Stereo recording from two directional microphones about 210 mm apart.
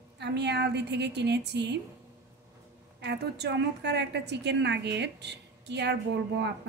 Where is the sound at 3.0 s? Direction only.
55° right (ahead or behind).